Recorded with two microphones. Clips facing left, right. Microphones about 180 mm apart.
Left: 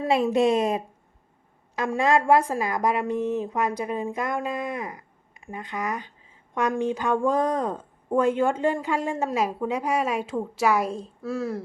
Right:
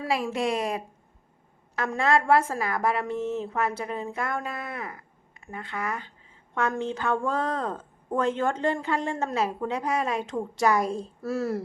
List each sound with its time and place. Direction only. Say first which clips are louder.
0.0 s a woman's voice: left 6 dB; 20° left (ahead or behind); by 11.6 s 5° right (ahead or behind)